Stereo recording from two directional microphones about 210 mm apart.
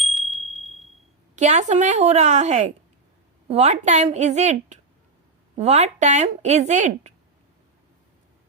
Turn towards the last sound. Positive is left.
turn(degrees=-35)  # may be behind; listen again after turning